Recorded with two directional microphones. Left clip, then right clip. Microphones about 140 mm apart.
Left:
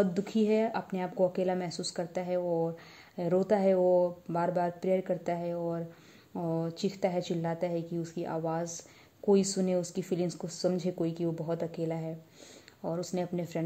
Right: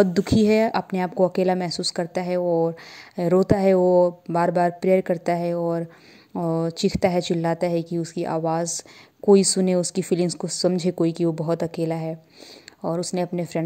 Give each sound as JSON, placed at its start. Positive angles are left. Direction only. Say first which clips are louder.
{"t": 0.0, "sound": "a woman's voice", "louder": "right 10 dB", "side_deg": -50}